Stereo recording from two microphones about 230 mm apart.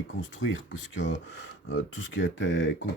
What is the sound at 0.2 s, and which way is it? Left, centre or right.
Speech, left.